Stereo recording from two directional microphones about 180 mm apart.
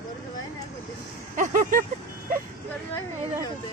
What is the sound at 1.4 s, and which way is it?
Speech, 50° right (ahead or behind).